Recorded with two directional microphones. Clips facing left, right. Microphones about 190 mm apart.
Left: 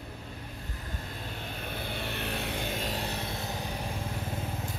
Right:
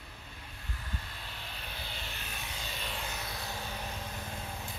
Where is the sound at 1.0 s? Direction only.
45° left (ahead or behind); by 3.7 s 20° left (ahead or behind).